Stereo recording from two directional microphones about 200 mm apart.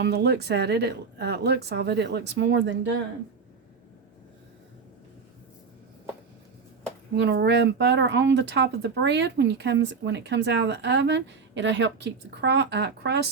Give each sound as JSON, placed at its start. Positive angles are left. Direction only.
{"t": 0.0, "sound": "speech", "side_deg": -55}
{"t": 7.2, "sound": "speech", "side_deg": -55}